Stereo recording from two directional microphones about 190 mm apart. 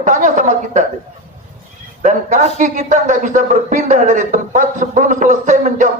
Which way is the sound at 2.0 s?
40° right (ahead or behind).